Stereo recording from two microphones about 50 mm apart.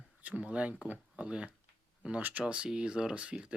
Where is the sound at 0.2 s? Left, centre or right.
Right.